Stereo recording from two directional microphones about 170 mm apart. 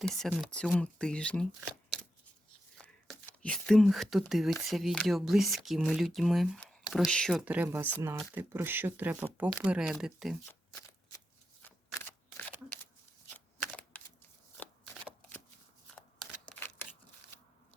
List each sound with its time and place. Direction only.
0.0 s speech: centre (ahead or behind)
2.7 s a sound: 5° left (ahead or behind)
4.3 s speech: centre (ahead or behind)
10.5 s shuffling cards: 10° left (ahead or behind)
13.3 s shuffling cards: 10° left (ahead or behind)
16.0 s scissors: 5° left (ahead or behind)